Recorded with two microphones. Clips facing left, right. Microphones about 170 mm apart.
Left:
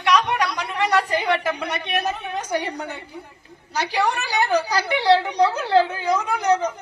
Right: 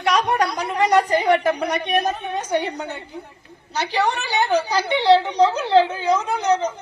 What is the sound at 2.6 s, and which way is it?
Speech, 10° right (ahead or behind).